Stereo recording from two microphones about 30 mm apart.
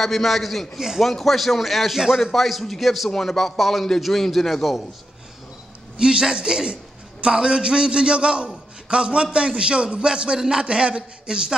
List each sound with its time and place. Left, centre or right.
0.0 s speech: centre
5.9 s a man's voice: right